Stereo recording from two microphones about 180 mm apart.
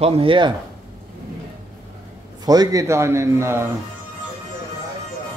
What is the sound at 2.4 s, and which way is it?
A man's voice, 20° right (ahead or behind).